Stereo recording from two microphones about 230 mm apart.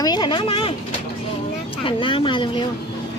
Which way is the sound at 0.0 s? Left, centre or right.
Centre.